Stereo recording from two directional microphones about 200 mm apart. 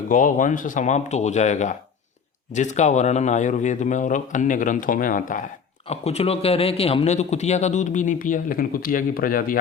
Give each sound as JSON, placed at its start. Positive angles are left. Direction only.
{"t": 0.1, "sound": "a man's voice", "side_deg": 40}
{"t": 5.9, "sound": "a man's voice", "side_deg": 30}